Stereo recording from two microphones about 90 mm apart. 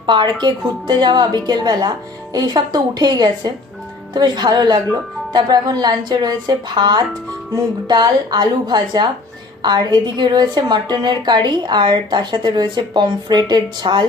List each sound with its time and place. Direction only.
0.0 s a woman's voice: 60° right (ahead or behind)